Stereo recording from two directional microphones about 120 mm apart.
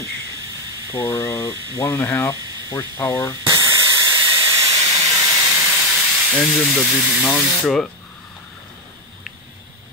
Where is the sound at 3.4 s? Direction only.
30° right (ahead or behind).